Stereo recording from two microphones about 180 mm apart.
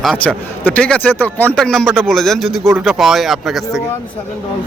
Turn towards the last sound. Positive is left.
turn(degrees=0)  # may be behind; listen again after turning